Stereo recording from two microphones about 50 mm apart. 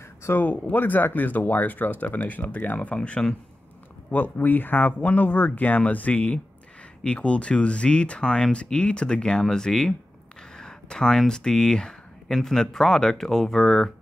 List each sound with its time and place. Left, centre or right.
0.4 s speech: left
4.1 s speech: left; by 13.9 s centre